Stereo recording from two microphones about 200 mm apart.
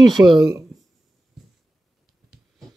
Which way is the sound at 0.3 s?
20° right (ahead or behind).